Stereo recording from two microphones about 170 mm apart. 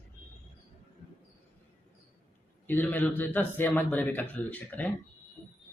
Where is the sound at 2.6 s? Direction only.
10° left (ahead or behind).